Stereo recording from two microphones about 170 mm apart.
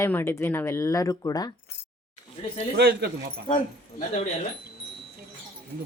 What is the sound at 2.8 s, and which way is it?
Speech, 90° right.